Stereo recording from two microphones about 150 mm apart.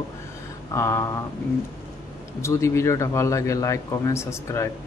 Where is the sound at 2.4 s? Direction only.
20° left (ahead or behind).